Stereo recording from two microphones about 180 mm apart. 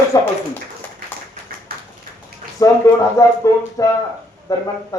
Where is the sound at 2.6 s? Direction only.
20° left (ahead or behind).